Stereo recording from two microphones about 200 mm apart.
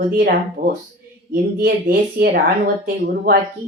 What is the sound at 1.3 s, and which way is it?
Speech, 50° right (ahead or behind).